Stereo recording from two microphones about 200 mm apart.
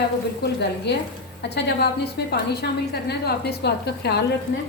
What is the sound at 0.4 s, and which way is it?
A woman's voice, 55° left (ahead or behind).